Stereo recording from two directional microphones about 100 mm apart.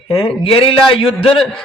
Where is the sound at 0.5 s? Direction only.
60° left (ahead or behind).